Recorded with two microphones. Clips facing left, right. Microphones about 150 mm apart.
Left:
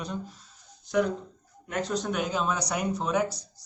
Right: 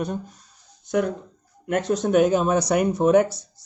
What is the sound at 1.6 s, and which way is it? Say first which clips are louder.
Speech: right 7 dB; 50° right (ahead or behind).